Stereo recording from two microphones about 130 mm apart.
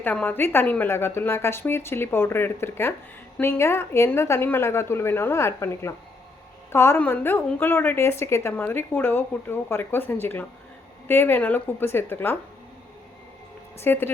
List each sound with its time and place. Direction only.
0.0 s a woman's voice: 15° left (ahead or behind)
13.7 s a woman's voice: 15° left (ahead or behind)